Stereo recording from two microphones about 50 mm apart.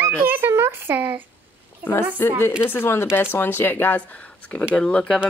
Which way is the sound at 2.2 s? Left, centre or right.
Left.